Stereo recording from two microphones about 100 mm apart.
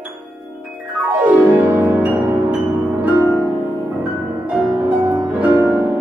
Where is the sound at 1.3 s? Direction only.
15° right (ahead or behind).